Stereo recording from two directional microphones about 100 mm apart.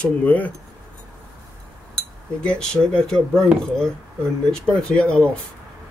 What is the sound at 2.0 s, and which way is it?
Cutlery, 10° left (ahead or behind).